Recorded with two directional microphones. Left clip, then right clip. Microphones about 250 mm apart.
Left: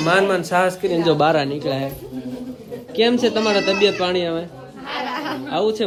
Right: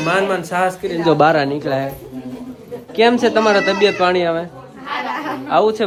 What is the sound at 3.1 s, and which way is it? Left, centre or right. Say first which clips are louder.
Speech: right 6 dB; right.